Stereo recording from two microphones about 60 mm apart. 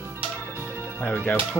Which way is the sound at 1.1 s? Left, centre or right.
Left.